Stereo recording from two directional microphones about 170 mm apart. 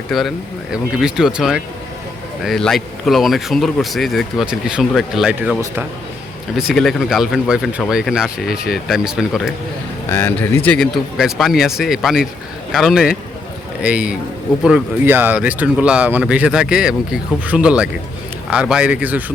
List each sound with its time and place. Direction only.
0.1 s speech: centre (ahead or behind)
6.6 s speech: centre (ahead or behind)
10.1 s speech: 15° left (ahead or behind); by 19.2 s 10° right (ahead or behind)